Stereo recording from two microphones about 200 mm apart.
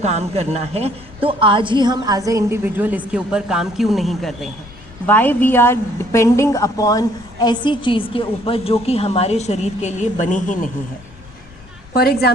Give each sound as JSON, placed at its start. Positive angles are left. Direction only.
{"t": 0.0, "sound": "a woman's voice", "side_deg": -35}
{"t": 11.9, "sound": "a woman's voice", "side_deg": 50}